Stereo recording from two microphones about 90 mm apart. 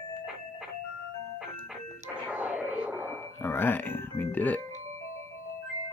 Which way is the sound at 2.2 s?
15° right (ahead or behind).